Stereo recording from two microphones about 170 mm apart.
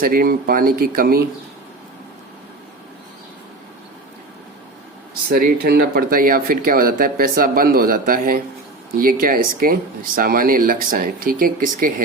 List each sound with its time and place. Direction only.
0.0 s speech: 60° right (ahead or behind)
5.3 s speech: 60° right (ahead or behind)